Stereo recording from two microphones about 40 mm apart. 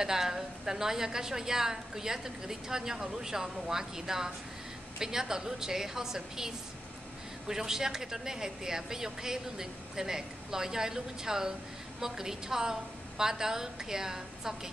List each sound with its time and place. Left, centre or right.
0.0 s a woman's voice: centre